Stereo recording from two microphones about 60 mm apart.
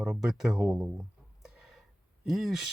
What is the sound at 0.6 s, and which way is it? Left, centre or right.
Speech, right.